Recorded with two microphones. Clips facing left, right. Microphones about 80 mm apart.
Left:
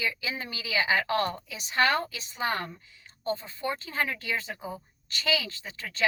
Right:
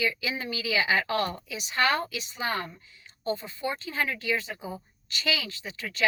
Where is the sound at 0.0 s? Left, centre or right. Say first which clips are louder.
Right 3 dB; left.